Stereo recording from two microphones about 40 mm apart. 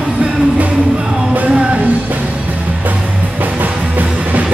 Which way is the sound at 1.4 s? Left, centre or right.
Right.